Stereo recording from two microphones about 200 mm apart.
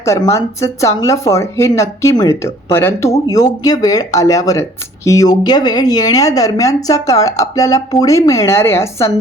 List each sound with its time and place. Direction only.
0.0 s speech: 15° left (ahead or behind)